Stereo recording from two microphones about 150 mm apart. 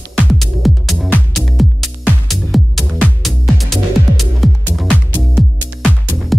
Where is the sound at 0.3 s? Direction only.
Centre (ahead or behind).